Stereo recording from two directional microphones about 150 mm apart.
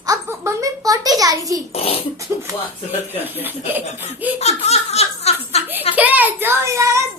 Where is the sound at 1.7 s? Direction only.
40° left (ahead or behind).